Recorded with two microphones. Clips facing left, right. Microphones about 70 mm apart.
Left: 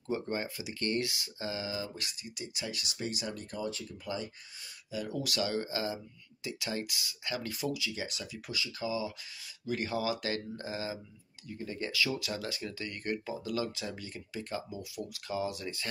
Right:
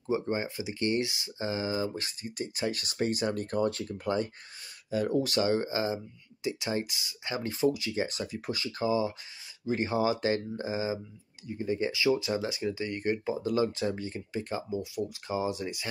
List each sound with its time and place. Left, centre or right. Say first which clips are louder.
0.0 s speech: right 4 dB; centre